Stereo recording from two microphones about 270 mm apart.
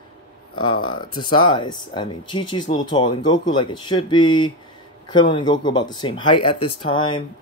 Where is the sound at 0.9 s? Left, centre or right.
Centre.